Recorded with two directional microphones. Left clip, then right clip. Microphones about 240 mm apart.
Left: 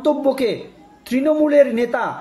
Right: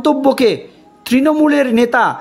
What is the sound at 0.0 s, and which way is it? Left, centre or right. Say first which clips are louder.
Speech: right 5 dB; right.